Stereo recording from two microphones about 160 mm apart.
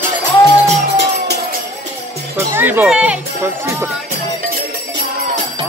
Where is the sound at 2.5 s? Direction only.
10° right (ahead or behind).